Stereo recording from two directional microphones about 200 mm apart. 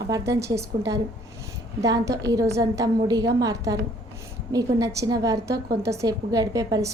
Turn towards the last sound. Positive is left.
turn(degrees=-20)  # may be behind; listen again after turning